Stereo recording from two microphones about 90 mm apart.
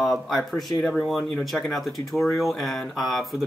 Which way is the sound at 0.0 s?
Centre (ahead or behind).